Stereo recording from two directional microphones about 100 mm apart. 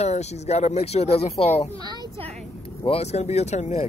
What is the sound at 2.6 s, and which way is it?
Speech, 75° left (ahead or behind).